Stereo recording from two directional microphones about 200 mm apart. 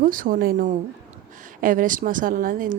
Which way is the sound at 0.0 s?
45° right (ahead or behind).